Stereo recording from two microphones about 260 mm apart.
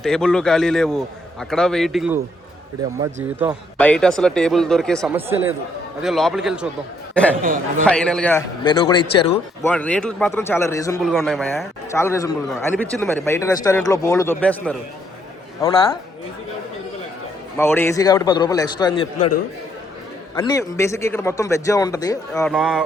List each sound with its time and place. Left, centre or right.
0.0 s a man's voice: centre
3.8 s a man's voice: centre
7.4 s speech: right
7.9 s a man's voice: centre
9.6 s a man's voice: centre
11.0 s a man's voice: centre
11.9 s a man's voice: centre
17.6 s a man's voice: centre
20.3 s a man's voice: centre
22.4 s a man's voice: centre